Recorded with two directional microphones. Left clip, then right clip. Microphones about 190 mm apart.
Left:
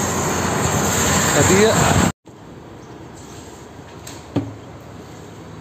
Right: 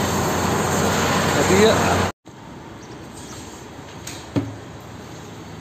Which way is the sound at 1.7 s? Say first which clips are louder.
Left 1 dB; 65° left (ahead or behind).